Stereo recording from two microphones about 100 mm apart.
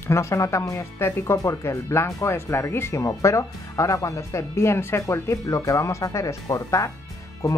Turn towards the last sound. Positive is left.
turn(degrees=30)  # may be behind; listen again after turning